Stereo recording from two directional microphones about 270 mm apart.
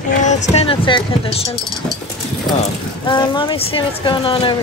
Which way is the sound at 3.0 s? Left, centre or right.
Centre.